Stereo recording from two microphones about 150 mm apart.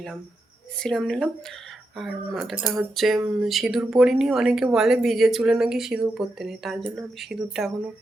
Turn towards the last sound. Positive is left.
turn(degrees=0)  # may be behind; listen again after turning